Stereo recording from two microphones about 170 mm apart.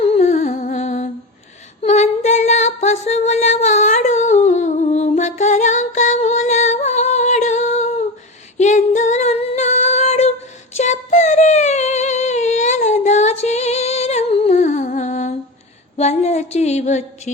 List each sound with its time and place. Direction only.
0.0 s humming: 40° left (ahead or behind)
1.8 s female singing: 40° left (ahead or behind)
16.0 s a sound: 40° left (ahead or behind)